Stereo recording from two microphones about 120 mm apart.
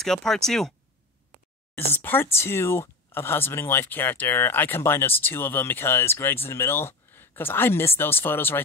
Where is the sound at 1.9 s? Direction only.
15° left (ahead or behind).